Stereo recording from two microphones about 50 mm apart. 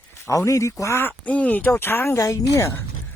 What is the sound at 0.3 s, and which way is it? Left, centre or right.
Speech, left.